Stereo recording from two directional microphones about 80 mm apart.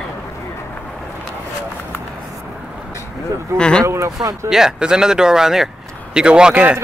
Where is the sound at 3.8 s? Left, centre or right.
Right.